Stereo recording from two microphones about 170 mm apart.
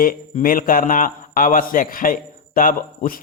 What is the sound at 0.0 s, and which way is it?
A man's voice, 55° left (ahead or behind).